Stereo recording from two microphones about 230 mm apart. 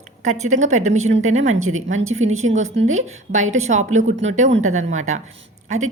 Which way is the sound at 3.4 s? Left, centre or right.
Right.